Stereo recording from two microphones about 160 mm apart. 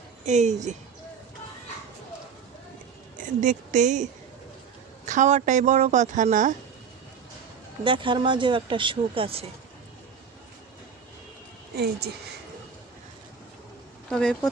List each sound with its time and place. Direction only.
0.3 s a woman's voice: 45° right (ahead or behind)
3.2 s a woman's voice: 50° right (ahead or behind)
7.9 s speech: 30° right (ahead or behind)
11.8 s speech: 90° right
14.1 s speech: 5° left (ahead or behind)